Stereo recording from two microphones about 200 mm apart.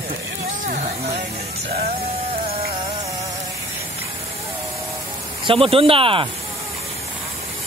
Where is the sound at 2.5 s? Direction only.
50° right (ahead or behind).